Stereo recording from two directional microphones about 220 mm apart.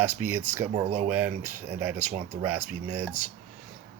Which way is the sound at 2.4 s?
10° right (ahead or behind).